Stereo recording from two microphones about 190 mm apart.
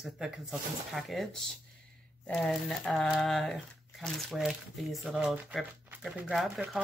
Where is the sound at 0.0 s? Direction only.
Centre (ahead or behind).